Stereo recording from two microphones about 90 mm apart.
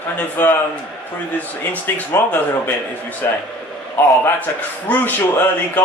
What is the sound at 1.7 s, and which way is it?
A man's voice, 20° left (ahead or behind).